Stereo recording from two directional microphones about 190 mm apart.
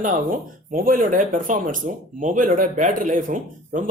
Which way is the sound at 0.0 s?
45° right (ahead or behind).